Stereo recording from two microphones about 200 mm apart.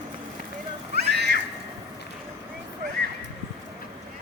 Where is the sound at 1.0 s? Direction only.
55° right (ahead or behind).